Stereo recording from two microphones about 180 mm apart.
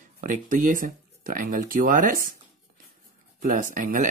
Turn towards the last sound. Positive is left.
turn(degrees=-50)  # may be behind; listen again after turning